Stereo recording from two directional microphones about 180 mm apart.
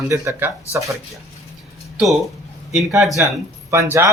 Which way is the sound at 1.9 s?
Centre (ahead or behind).